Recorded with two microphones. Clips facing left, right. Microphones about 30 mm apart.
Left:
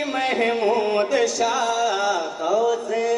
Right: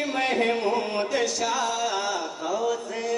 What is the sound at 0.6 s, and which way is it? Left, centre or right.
Music, centre.